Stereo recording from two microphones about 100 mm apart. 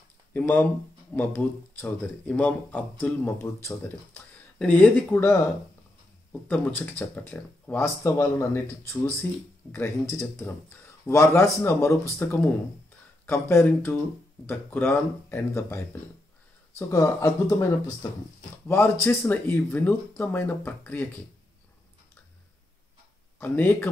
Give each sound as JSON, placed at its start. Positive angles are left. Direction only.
{"t": 0.3, "sound": "speech", "side_deg": 20}
{"t": 3.3, "sound": "speech", "side_deg": 25}
{"t": 4.6, "sound": "speech", "side_deg": 10}
{"t": 6.4, "sound": "speech", "side_deg": 15}
{"t": 7.8, "sound": "speech", "side_deg": 25}
{"t": 23.4, "sound": "speech", "side_deg": 20}